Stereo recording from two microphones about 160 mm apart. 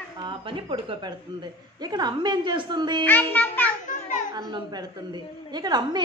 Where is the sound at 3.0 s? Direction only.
10° left (ahead or behind).